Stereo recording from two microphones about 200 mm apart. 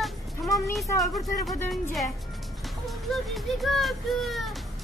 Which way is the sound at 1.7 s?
Centre (ahead or behind).